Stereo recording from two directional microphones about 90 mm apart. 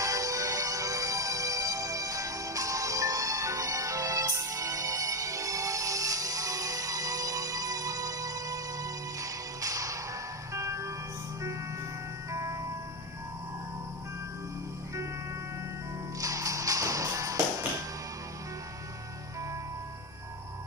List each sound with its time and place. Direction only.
0.0 s music: 40° right (ahead or behind)
12.3 s music: 35° right (ahead or behind)
16.2 s music: 40° right (ahead or behind)